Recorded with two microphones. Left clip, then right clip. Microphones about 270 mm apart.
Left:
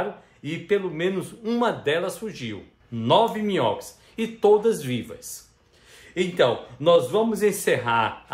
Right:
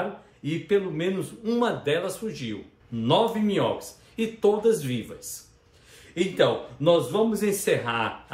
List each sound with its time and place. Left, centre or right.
0.4 s speech: left